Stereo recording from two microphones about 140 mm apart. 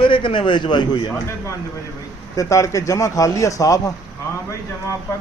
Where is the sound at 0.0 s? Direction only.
35° left (ahead or behind).